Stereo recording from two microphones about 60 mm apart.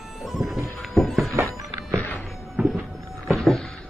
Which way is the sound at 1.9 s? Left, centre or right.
Left.